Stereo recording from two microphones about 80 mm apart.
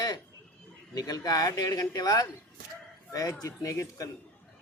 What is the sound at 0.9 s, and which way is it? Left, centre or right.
A man's voice, left.